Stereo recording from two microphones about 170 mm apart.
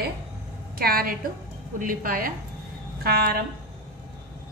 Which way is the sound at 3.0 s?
65° right (ahead or behind).